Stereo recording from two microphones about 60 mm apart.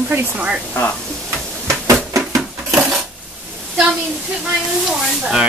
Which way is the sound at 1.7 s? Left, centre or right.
Right.